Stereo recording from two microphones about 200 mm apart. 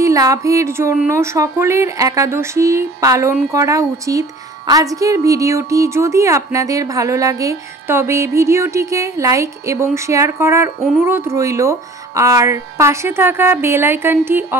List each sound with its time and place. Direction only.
0.0 s speech: 15° right (ahead or behind)
10.8 s speech: centre (ahead or behind)
11.1 s speech: 15° right (ahead or behind)